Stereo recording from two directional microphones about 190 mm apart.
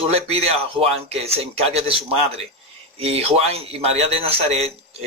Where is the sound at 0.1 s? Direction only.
30° right (ahead or behind).